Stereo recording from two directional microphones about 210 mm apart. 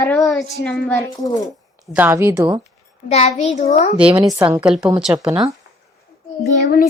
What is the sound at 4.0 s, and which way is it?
A child's voice, 5° right (ahead or behind).